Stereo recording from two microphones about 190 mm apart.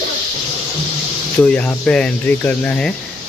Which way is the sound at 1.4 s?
5° left (ahead or behind).